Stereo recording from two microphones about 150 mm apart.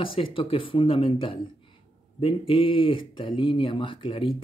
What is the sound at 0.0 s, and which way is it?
Speech, 35° left (ahead or behind).